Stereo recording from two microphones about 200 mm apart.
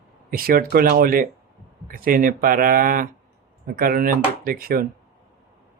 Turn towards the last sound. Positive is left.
turn(degrees=-45)  # may be behind; listen again after turning